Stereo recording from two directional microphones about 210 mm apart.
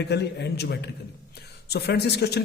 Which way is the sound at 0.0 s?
50° left (ahead or behind).